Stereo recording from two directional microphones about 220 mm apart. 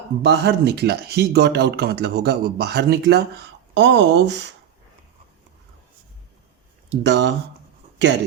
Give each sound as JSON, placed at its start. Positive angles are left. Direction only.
{"t": 0.2, "sound": "speech", "side_deg": -50}
{"t": 6.9, "sound": "speech", "side_deg": -50}